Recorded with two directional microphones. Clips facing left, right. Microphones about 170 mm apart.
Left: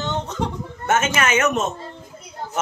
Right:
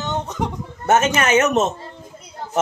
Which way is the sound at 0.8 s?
35° right (ahead or behind).